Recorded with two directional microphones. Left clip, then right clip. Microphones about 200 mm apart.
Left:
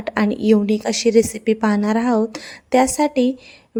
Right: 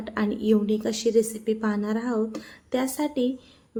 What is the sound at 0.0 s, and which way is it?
A woman's voice, 40° left (ahead or behind).